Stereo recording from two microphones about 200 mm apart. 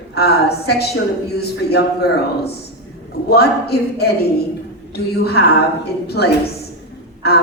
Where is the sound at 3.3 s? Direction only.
50° left (ahead or behind).